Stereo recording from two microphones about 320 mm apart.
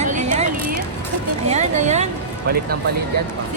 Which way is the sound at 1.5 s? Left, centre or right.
Right.